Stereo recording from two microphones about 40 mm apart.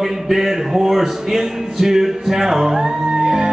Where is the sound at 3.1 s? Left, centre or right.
Centre.